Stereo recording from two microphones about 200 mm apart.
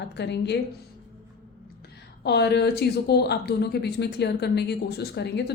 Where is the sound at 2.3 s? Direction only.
55° left (ahead or behind).